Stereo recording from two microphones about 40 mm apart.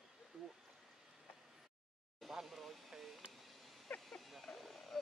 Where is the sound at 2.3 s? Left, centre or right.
Centre.